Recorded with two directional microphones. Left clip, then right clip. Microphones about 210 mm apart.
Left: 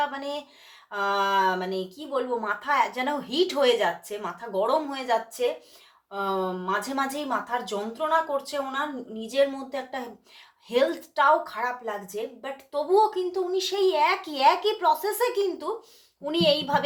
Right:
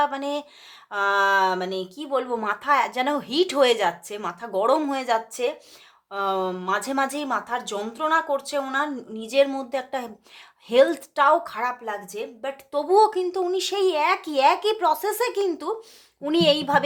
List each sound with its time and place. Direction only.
0.0 s a woman's voice: 40° right (ahead or behind)